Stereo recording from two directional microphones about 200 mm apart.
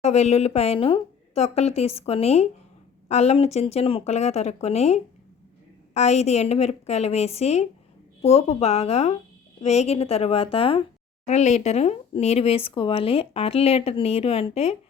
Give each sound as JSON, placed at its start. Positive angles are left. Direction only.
{"t": 0.0, "sound": "speech", "side_deg": 35}